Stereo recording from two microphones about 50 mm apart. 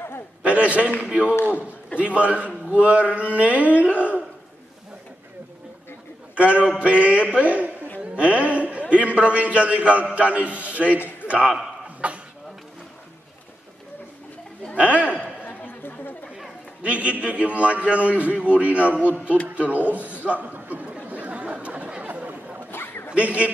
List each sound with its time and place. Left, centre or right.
0.4 s a sound: right
1.0 s a man's voice: right
6.3 s a man's voice: right
11.0 s a sound: left
11.2 s a man's voice: right
14.8 s a man's voice: right
15.4 s chatter: left
16.8 s a man's voice: right
21.0 s chatter: right
22.0 s chatter: right
22.7 s a sound: left
23.1 s a man's voice: right